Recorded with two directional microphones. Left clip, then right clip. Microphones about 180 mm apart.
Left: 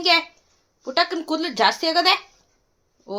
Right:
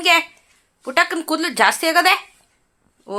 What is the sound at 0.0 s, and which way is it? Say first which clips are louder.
A child's voice: right 3 dB; 15° right (ahead or behind).